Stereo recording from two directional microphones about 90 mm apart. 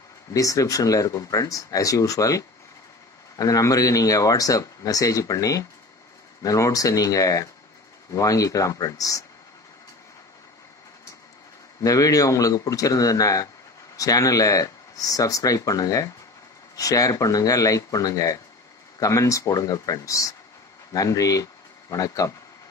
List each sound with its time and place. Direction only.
0.3 s speech: 40° left (ahead or behind)
11.8 s speech: 40° left (ahead or behind)